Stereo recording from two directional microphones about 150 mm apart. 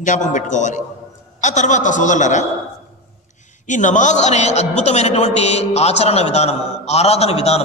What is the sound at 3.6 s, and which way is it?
A man's voice, 55° left (ahead or behind).